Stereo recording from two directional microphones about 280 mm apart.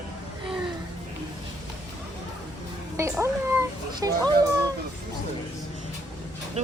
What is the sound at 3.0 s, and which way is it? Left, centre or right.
Speech, centre.